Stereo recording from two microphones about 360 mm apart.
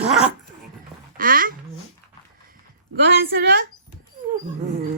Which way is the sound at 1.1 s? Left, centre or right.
Right.